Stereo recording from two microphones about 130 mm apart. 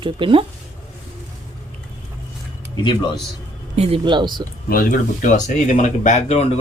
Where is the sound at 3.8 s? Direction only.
50° right (ahead or behind).